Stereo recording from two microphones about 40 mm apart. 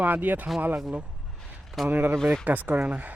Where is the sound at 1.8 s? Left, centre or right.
Right.